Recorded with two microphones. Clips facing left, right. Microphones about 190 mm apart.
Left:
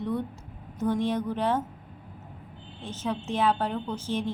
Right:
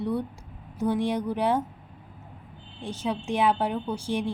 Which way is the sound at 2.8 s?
10° right (ahead or behind).